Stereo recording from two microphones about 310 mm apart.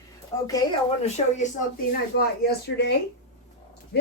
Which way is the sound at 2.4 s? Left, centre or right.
Left.